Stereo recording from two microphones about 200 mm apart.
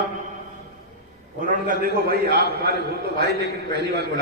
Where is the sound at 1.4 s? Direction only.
45° right (ahead or behind).